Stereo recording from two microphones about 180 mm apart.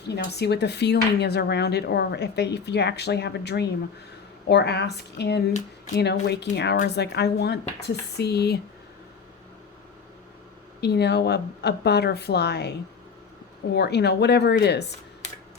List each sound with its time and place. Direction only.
0.1 s speech: 65° left (ahead or behind)
10.8 s speech: 65° left (ahead or behind)
13.7 s speech: 65° left (ahead or behind)